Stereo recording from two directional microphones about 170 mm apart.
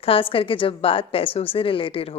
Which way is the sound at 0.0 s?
35° left (ahead or behind).